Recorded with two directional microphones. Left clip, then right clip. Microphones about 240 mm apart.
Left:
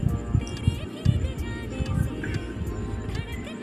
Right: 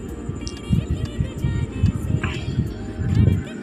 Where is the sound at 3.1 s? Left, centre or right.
Centre.